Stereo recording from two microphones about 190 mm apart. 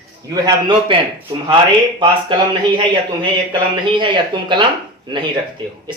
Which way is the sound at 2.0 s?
25° right (ahead or behind).